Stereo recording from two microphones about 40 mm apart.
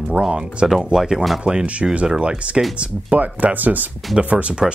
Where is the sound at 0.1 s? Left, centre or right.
Right.